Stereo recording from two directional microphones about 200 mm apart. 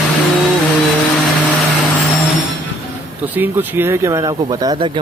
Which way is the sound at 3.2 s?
10° right (ahead or behind).